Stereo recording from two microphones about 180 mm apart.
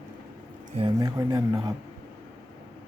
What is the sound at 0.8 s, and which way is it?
Speech, 25° right (ahead or behind).